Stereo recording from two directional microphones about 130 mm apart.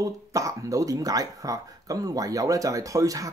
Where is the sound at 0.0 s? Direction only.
25° right (ahead or behind).